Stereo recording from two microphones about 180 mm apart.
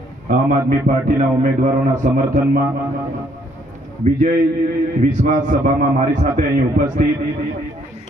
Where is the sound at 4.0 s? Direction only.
50° right (ahead or behind).